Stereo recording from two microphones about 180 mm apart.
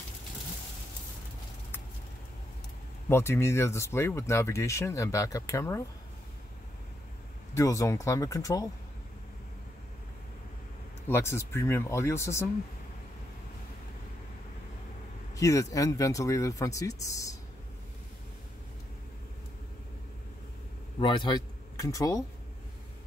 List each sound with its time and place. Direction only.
3.1 s speech: 15° left (ahead or behind)
7.5 s speech: 15° left (ahead or behind)
11.1 s speech: 15° left (ahead or behind)
15.3 s speech: 15° left (ahead or behind)
21.0 s speech: 25° left (ahead or behind)